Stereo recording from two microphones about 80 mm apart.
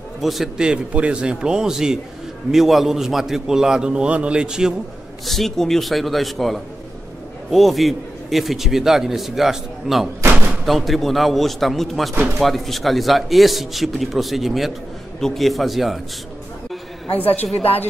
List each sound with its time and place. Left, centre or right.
0.2 s a man's voice: centre
5.2 s a man's voice: centre
17.1 s a woman's voice: left